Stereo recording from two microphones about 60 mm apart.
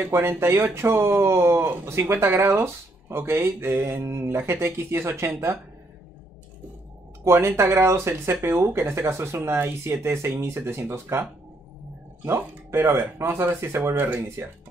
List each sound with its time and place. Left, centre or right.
0.0 s speech: right
7.2 s speech: right
9.8 s speech: right
12.3 s speech: right